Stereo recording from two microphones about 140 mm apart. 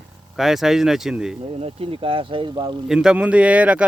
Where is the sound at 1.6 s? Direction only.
40° right (ahead or behind).